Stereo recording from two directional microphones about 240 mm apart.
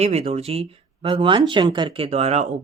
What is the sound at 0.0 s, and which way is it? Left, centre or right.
Speech, right.